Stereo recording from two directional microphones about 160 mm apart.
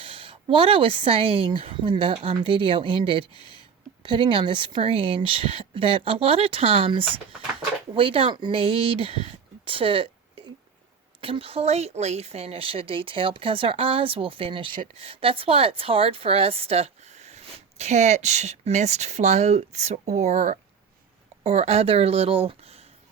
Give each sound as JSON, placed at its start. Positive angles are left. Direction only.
{"t": 0.0, "sound": "speech", "side_deg": -35}
{"t": 9.6, "sound": "a sound", "side_deg": -35}
{"t": 11.2, "sound": "speech", "side_deg": -35}